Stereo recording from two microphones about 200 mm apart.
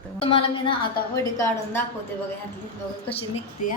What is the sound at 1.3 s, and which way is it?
Speech, 10° left (ahead or behind).